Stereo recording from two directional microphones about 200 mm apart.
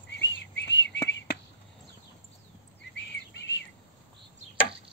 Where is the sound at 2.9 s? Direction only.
65° left (ahead or behind).